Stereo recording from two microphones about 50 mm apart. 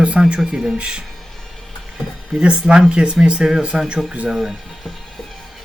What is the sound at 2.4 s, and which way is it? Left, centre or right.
Speech, centre.